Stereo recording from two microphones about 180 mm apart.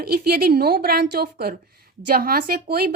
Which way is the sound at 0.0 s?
60° right (ahead or behind).